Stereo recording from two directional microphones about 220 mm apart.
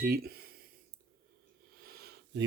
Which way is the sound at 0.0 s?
45° right (ahead or behind).